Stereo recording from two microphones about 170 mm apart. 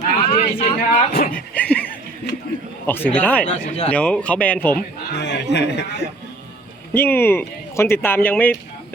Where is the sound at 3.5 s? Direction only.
40° left (ahead or behind).